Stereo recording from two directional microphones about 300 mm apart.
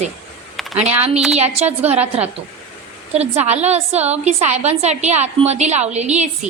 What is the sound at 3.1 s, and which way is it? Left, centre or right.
A woman's voice, right.